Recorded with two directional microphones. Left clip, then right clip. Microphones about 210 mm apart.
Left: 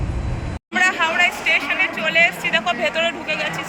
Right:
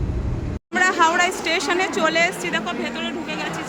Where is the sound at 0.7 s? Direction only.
20° right (ahead or behind).